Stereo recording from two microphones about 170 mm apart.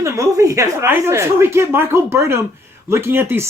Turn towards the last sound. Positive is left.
turn(degrees=-15)  # may be behind; listen again after turning